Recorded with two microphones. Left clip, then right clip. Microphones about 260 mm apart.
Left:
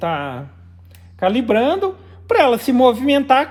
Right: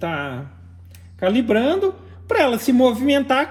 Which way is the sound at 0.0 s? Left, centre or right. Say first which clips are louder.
Left 4 dB; left.